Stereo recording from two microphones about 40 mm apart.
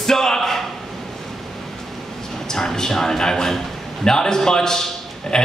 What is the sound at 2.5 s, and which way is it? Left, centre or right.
A man's voice, centre.